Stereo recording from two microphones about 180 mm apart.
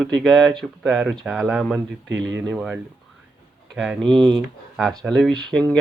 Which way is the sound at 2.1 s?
90° right.